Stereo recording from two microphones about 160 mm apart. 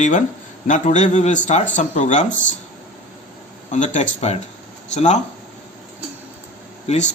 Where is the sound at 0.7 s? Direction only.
50° left (ahead or behind).